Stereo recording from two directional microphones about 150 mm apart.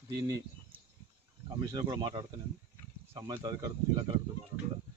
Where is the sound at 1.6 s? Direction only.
25° right (ahead or behind).